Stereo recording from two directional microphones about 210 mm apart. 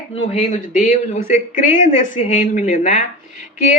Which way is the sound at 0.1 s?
30° left (ahead or behind).